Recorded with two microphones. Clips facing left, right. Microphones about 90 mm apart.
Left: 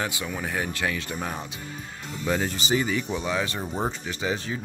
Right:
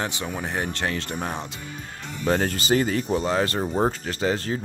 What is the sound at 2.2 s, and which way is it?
Speech, 55° right (ahead or behind).